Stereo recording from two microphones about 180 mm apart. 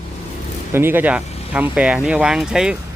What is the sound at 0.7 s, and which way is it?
Speech, 10° right (ahead or behind).